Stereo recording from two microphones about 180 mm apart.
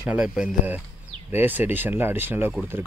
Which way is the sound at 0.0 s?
5° right (ahead or behind).